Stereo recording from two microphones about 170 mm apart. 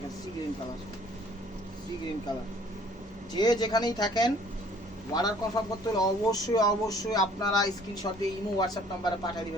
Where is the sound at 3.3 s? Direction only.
25° left (ahead or behind).